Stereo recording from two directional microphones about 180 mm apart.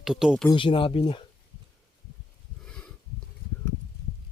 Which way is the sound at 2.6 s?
5° left (ahead or behind).